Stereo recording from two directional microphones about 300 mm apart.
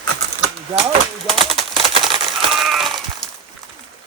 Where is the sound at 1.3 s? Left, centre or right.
Centre.